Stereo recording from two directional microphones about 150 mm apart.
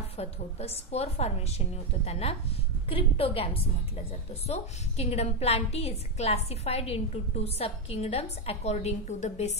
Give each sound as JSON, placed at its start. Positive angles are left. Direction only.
{"t": 0.2, "sound": "a woman's voice", "side_deg": 45}